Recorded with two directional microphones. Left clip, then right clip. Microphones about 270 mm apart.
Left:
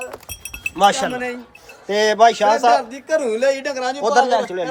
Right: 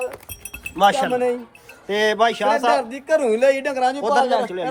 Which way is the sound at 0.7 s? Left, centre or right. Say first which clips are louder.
Left 1 dB; centre.